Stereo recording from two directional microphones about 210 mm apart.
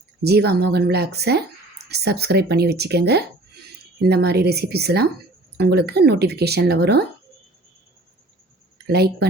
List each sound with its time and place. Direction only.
0.2 s speech: 50° right (ahead or behind)
8.9 s speech: 50° right (ahead or behind)